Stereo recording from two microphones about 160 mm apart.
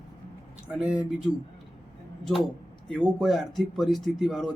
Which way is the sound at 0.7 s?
5° right (ahead or behind).